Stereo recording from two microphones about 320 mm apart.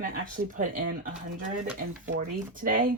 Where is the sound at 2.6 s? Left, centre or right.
Right.